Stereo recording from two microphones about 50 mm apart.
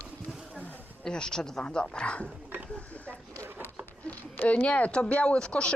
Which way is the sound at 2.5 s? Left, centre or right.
Right.